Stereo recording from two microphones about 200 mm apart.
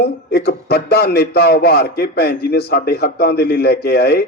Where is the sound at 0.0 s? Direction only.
50° left (ahead or behind).